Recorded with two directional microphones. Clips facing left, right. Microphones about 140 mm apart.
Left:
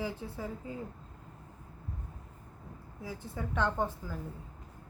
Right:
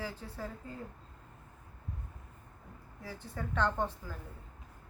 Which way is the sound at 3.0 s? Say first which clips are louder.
Left 2 dB; 15° left (ahead or behind).